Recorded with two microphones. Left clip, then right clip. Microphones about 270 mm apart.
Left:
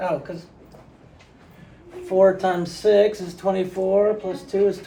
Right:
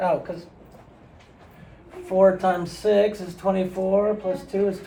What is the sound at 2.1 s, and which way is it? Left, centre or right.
Speech, centre.